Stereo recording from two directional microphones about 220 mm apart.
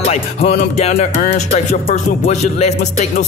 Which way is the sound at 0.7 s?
30° left (ahead or behind).